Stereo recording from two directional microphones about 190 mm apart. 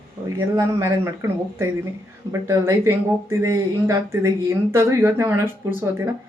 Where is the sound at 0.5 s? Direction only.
15° right (ahead or behind).